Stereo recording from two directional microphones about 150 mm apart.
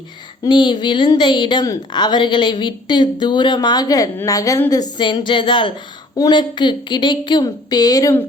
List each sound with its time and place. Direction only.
0.4 s a woman's voice: 30° left (ahead or behind)